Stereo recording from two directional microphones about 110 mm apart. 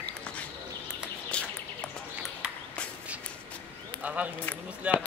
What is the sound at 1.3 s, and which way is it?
Bird, 10° left (ahead or behind).